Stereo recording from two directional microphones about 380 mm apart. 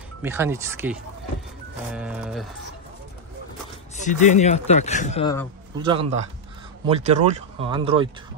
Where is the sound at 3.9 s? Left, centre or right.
Centre.